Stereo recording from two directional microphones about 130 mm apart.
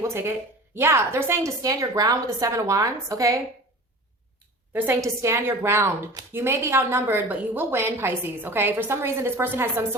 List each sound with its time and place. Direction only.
0.0 s speech: 20° right (ahead or behind)
4.7 s speech: 20° right (ahead or behind)